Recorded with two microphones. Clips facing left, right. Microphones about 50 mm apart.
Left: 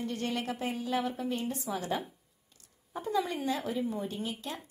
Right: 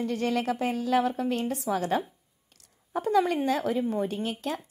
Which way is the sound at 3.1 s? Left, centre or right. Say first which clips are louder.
Right 7 dB; right.